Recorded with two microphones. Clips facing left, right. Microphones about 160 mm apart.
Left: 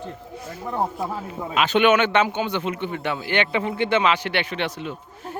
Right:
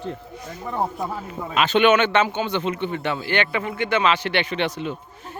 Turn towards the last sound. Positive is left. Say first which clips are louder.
# right 3 dB
turn(degrees=0)  # may be behind; listen again after turning